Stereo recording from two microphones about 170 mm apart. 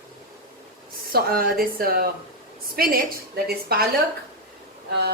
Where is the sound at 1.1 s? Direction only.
60° right (ahead or behind).